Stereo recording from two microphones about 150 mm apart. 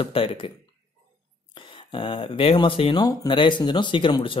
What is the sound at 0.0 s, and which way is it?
Speech, 35° left (ahead or behind).